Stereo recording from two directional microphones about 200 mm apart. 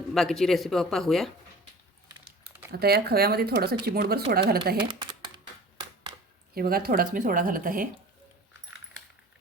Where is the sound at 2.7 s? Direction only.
50° right (ahead or behind).